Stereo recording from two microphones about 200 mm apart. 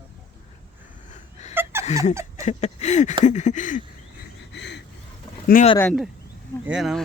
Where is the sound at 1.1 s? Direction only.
35° left (ahead or behind).